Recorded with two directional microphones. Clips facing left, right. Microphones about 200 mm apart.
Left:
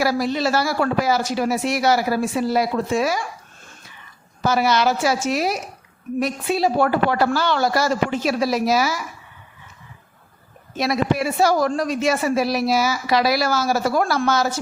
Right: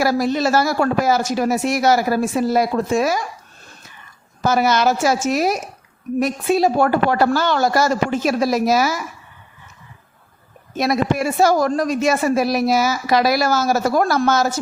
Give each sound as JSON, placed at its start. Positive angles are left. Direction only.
{"t": 0.0, "sound": "a woman's voice", "side_deg": -45}
{"t": 4.4, "sound": "a woman's voice", "side_deg": -45}
{"t": 10.8, "sound": "a woman's voice", "side_deg": -50}